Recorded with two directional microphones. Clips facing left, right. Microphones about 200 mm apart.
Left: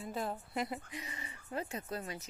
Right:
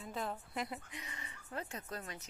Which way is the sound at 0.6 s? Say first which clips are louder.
Left 4 dB; 5° left (ahead or behind).